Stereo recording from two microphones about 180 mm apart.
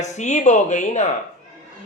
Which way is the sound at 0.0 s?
40° left (ahead or behind).